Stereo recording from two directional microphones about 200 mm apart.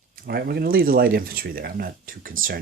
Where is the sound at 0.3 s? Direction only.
50° right (ahead or behind).